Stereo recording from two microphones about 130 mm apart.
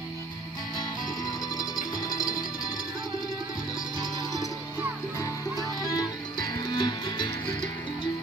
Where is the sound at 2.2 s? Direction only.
30° left (ahead or behind).